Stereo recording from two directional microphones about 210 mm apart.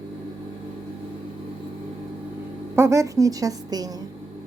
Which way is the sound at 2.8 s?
15° right (ahead or behind).